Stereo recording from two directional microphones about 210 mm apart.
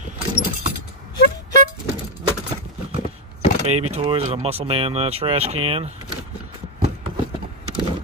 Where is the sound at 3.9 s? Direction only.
25° right (ahead or behind).